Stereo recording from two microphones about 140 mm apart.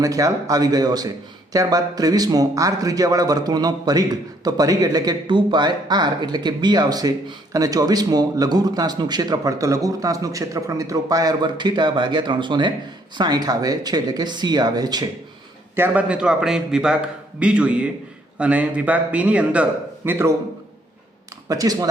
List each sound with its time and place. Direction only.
0.0 s a man's voice: 25° right (ahead or behind)
15.7 s a man's voice: 15° right (ahead or behind)
21.4 s speech: 25° right (ahead or behind)